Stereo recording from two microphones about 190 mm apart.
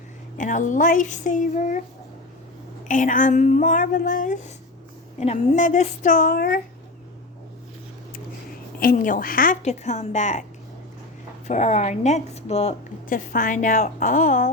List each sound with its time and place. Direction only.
0.3 s speech: 40° left (ahead or behind)
2.8 s a woman's voice: 45° left (ahead or behind)
8.8 s a woman's voice: 45° left (ahead or behind)
11.4 s a woman's voice: 35° left (ahead or behind)